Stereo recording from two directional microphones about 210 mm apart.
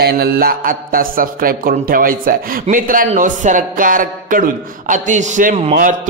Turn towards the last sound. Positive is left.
turn(degrees=-40)  # may be behind; listen again after turning